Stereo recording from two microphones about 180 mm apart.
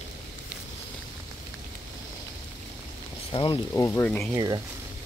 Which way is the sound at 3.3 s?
30° left (ahead or behind).